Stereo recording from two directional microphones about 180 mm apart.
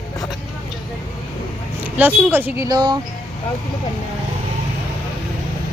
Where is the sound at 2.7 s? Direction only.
25° right (ahead or behind).